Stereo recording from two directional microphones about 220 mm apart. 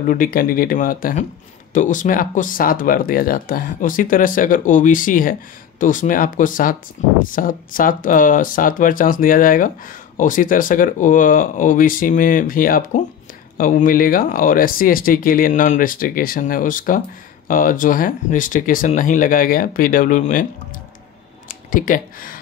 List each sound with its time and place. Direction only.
0.1 s speech: 40° left (ahead or behind)
21.7 s speech: 40° left (ahead or behind)